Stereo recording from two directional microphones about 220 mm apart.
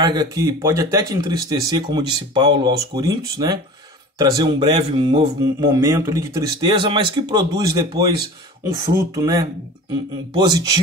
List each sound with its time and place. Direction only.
0.0 s speech: 20° right (ahead or behind)
9.1 s speech: 15° right (ahead or behind)